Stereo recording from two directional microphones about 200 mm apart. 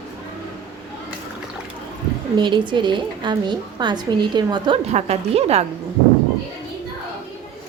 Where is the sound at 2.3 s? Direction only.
25° right (ahead or behind).